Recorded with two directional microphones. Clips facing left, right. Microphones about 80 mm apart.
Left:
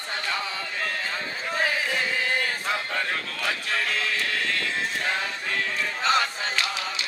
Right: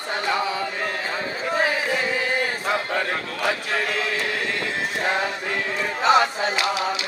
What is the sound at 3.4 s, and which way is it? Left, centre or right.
Music, centre.